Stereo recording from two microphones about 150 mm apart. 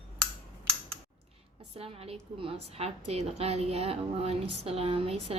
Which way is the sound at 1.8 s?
40° right (ahead or behind).